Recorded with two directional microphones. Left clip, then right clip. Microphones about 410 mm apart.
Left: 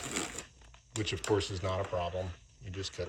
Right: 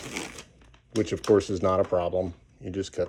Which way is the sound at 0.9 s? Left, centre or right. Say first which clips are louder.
Right 10 dB; centre.